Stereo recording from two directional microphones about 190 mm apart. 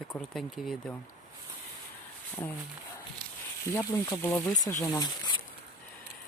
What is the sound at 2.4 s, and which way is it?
Speech, 15° left (ahead or behind).